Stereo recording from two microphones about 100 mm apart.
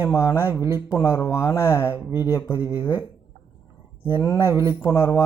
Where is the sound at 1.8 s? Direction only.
15° right (ahead or behind).